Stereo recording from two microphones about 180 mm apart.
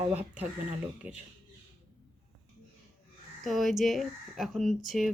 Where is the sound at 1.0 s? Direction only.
10° right (ahead or behind).